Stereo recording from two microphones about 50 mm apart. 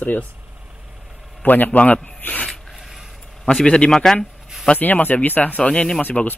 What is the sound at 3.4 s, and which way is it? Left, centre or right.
Speech, centre.